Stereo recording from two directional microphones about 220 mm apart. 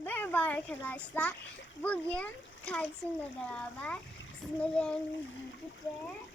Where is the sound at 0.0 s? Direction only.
10° left (ahead or behind).